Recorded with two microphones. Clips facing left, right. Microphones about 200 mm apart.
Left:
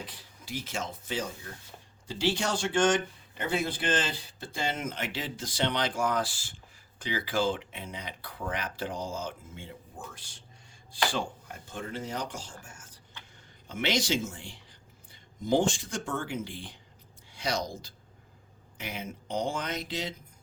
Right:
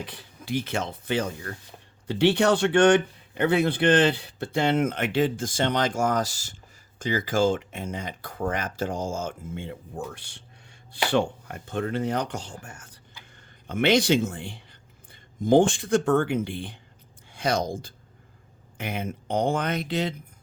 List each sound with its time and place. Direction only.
0.0 s speech: 65° right (ahead or behind); by 9.6 s 45° right (ahead or behind)
9.6 s speech: 65° right (ahead or behind)